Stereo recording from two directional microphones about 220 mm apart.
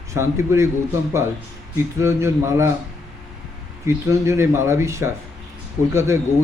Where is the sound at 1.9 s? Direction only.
10° right (ahead or behind).